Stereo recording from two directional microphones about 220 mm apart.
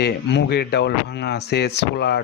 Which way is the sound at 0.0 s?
50° left (ahead or behind).